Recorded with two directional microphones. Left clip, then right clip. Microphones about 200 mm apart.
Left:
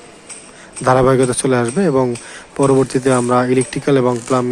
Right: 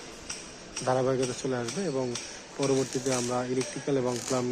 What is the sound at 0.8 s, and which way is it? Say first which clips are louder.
Speech: left 15 dB; 25° left (ahead or behind).